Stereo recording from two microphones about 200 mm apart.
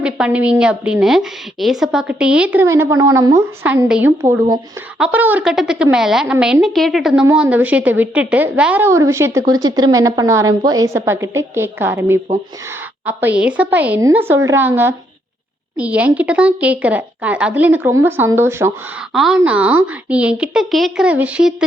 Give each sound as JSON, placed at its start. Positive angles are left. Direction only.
{"t": 0.0, "sound": "speech", "side_deg": -5}
{"t": 19.1, "sound": "a woman's voice", "side_deg": 0}